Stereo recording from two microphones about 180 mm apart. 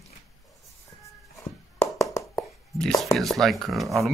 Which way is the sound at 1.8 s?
15° left (ahead or behind).